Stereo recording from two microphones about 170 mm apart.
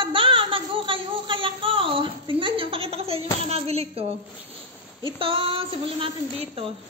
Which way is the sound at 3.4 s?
35° right (ahead or behind).